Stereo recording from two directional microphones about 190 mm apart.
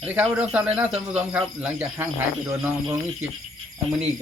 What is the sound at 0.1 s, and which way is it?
Speech, 5° right (ahead or behind).